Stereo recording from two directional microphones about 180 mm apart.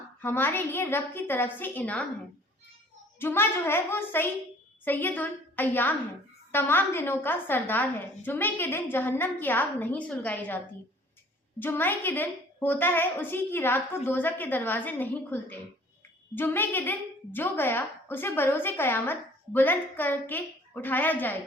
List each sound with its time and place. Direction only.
0.2 s a woman's voice: 10° left (ahead or behind)
3.2 s a woman's voice: 10° left (ahead or behind)
11.6 s a woman's voice: 10° left (ahead or behind)